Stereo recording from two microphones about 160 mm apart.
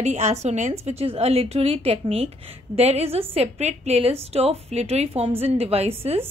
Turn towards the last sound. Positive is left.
turn(degrees=-40)  # may be behind; listen again after turning